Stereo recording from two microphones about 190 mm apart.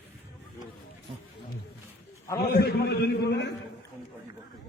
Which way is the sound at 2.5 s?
55° left (ahead or behind).